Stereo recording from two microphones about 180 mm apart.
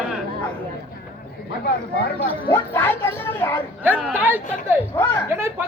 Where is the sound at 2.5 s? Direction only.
10° left (ahead or behind).